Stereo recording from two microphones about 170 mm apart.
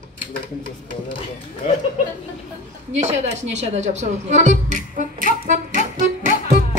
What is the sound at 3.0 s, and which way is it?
Speech, 40° right (ahead or behind).